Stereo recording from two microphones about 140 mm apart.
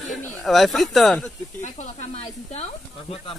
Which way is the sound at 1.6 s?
55° left (ahead or behind).